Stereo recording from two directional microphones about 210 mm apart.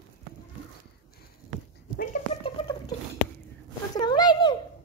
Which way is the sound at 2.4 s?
25° left (ahead or behind).